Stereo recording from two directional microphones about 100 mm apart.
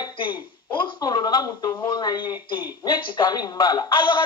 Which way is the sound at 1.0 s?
40° left (ahead or behind).